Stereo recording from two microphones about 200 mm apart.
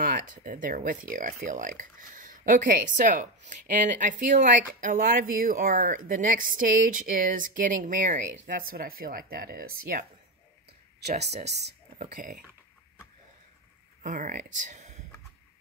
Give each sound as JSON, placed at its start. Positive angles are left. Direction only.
{"t": 0.0, "sound": "speech", "side_deg": -40}
{"t": 11.4, "sound": "speech", "side_deg": -55}
{"t": 12.0, "sound": "speech", "side_deg": -35}
{"t": 14.0, "sound": "speech", "side_deg": -40}
{"t": 14.6, "sound": "a sound", "side_deg": -35}